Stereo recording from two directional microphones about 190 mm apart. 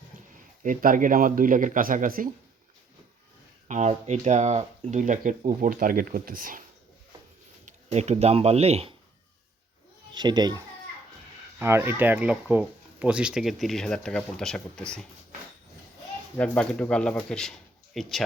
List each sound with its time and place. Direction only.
0.6 s speech: 45° right (ahead or behind)
3.7 s speech: 35° right (ahead or behind)
7.6 s speech: 35° right (ahead or behind)
10.2 s speech: 20° right (ahead or behind)
11.6 s speech: 15° right (ahead or behind); by 15.0 s 5° left (ahead or behind)
16.4 s speech: 5° left (ahead or behind)